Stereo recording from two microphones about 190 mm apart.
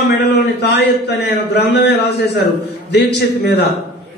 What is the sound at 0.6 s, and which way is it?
A man's voice, 60° left (ahead or behind).